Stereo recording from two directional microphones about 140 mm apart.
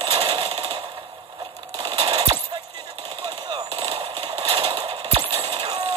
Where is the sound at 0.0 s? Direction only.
45° right (ahead or behind).